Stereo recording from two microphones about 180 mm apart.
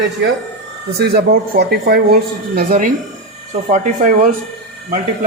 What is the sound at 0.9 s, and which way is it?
A man's voice, 65° right (ahead or behind).